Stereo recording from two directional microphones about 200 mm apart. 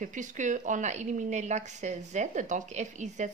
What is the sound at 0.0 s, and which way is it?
Speech, 40° right (ahead or behind).